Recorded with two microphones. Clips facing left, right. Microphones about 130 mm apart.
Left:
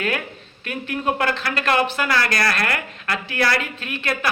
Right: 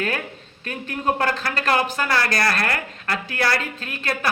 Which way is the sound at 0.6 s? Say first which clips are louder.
Left 1 dB; 40° right (ahead or behind).